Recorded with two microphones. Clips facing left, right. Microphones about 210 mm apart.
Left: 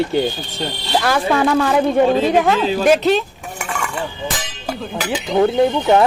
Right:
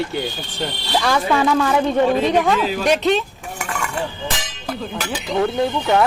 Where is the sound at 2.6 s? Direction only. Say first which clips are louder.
Left 3 dB; 30° left (ahead or behind).